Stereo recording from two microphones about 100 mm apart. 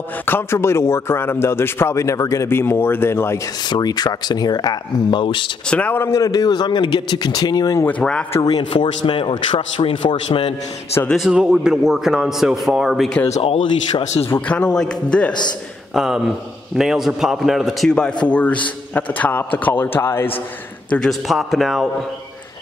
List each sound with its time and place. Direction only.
0.2 s a man's voice: 20° left (ahead or behind)
3.6 s speech: 45° left (ahead or behind)
5.7 s a man's voice: 15° left (ahead or behind); by 7.8 s 35° left (ahead or behind)
7.8 s a man's voice: 10° left (ahead or behind)
8.4 s speech: 45° left (ahead or behind)
8.7 s a man's voice: 60° left (ahead or behind)
11.1 s a man's voice: 5° right (ahead or behind)
13.4 s a man's voice: 65° left (ahead or behind)
14.5 s a man's voice: 10° left (ahead or behind)
15.9 s a man's voice: 5° right (ahead or behind); by 20.2 s 25° left (ahead or behind)
20.9 s a man's voice: 5° left (ahead or behind)